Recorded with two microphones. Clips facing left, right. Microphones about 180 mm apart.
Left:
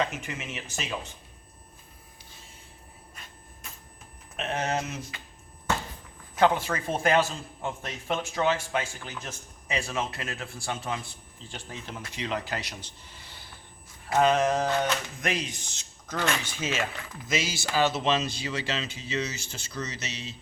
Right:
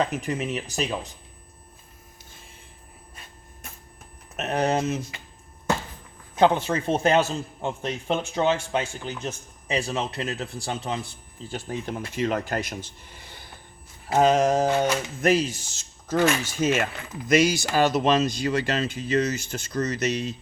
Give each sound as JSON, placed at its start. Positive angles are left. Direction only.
{"t": 0.0, "sound": "speech", "side_deg": -35}
{"t": 4.4, "sound": "speech", "side_deg": -40}
{"t": 6.3, "sound": "a man's voice", "side_deg": -25}
{"t": 11.5, "sound": "speech", "side_deg": -50}
{"t": 14.1, "sound": "speech", "side_deg": -40}
{"t": 16.2, "sound": "speech", "side_deg": -10}
{"t": 16.6, "sound": "speech", "side_deg": -50}